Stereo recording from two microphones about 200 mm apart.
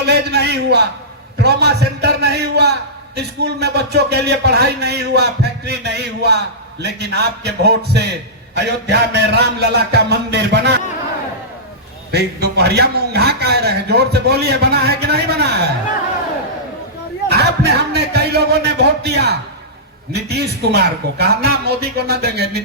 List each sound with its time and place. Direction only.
0.0 s a man's voice: 55° right (ahead or behind)
12.1 s a man's voice: 55° right (ahead or behind)
17.2 s a man's voice: 55° right (ahead or behind)